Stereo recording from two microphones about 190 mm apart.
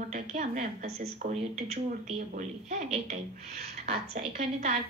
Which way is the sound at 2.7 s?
40° right (ahead or behind).